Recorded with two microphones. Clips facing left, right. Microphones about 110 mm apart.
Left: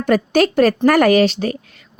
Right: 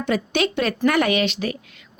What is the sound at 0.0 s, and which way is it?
A woman's voice, 45° left (ahead or behind).